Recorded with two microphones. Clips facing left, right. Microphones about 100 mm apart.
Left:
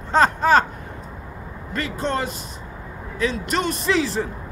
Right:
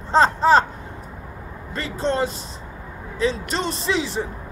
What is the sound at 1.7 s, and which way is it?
A man's voice, 30° right (ahead or behind).